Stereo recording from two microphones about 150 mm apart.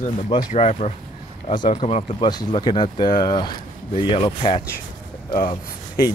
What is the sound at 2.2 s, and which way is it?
Speech, 30° left (ahead or behind).